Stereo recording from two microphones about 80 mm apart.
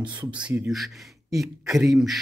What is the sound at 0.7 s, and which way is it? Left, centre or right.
Speech, centre.